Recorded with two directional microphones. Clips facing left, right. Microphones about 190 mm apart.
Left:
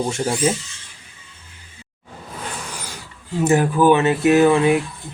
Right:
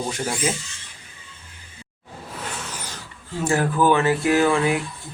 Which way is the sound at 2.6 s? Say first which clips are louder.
Left 1 dB; 10° left (ahead or behind).